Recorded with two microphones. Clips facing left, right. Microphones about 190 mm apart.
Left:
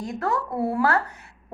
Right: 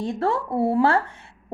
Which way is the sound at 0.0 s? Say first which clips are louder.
Right 3 dB; 30° right (ahead or behind).